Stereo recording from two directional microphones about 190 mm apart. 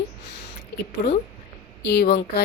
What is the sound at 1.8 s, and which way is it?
Speech, 60° left (ahead or behind).